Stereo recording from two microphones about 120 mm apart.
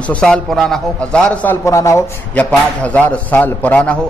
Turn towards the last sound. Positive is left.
turn(degrees=10)  # may be behind; listen again after turning